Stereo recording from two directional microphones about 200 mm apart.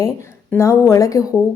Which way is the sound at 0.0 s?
15° left (ahead or behind).